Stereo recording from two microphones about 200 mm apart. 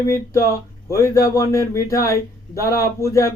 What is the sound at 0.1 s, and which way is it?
Speech, 15° left (ahead or behind).